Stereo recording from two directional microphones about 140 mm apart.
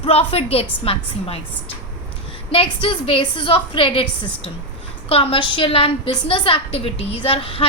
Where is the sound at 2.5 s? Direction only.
40° left (ahead or behind).